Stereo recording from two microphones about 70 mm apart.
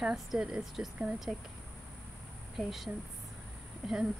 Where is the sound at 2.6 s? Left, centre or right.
Centre.